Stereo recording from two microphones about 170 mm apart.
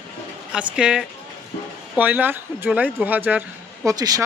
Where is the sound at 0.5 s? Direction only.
5° right (ahead or behind).